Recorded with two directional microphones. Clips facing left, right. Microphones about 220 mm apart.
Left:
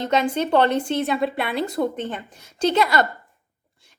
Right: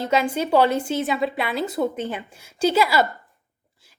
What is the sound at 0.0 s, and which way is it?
A woman's voice, 5° right (ahead or behind).